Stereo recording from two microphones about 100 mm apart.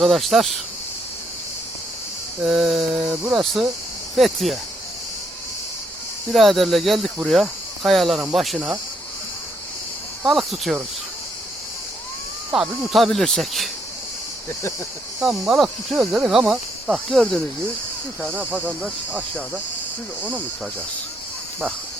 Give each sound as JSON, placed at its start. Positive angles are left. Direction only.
{"t": 0.0, "sound": "speech", "side_deg": 0}
{"t": 2.4, "sound": "speech", "side_deg": -5}
{"t": 6.3, "sound": "speech", "side_deg": 0}
{"t": 10.2, "sound": "speech", "side_deg": 0}
{"t": 12.5, "sound": "speech", "side_deg": -5}
{"t": 15.2, "sound": "speech", "side_deg": -5}
{"t": 18.2, "sound": "speech", "side_deg": -15}